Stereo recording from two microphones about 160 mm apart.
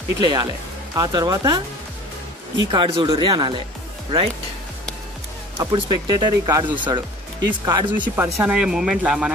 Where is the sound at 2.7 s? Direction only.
30° right (ahead or behind).